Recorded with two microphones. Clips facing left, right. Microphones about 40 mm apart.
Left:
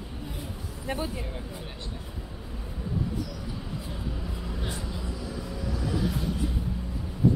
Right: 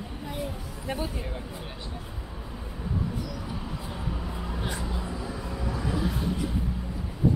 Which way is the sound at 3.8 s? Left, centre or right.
Centre.